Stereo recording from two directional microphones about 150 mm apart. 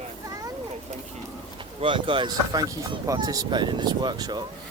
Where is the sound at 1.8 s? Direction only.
35° right (ahead or behind).